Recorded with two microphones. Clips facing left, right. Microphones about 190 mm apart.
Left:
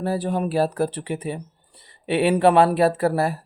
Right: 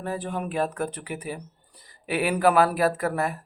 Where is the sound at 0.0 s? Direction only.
35° left (ahead or behind).